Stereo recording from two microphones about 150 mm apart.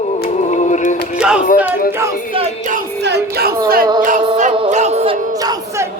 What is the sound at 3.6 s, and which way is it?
Music, 75° right (ahead or behind).